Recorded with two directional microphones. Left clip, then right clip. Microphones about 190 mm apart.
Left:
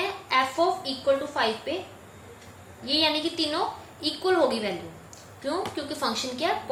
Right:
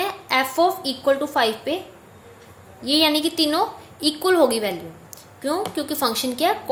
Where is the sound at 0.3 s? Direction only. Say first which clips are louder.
Right 4 dB; 60° right (ahead or behind).